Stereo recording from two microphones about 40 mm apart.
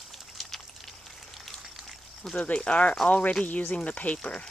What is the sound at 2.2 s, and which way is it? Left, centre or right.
Speech, centre.